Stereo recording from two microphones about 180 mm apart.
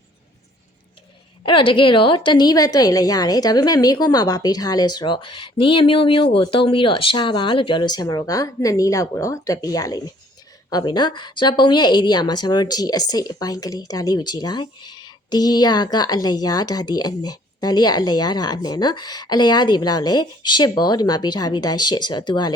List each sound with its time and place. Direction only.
1.5 s speech: 30° left (ahead or behind)